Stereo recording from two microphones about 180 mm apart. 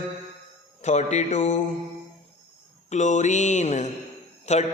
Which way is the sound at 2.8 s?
40° left (ahead or behind).